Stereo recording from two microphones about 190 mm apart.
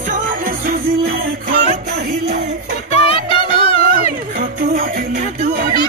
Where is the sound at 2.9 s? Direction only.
30° left (ahead or behind).